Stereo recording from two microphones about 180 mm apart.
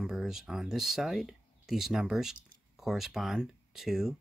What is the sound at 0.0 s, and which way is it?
Speech, centre (ahead or behind).